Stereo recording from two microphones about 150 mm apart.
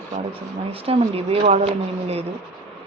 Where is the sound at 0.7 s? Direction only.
40° right (ahead or behind).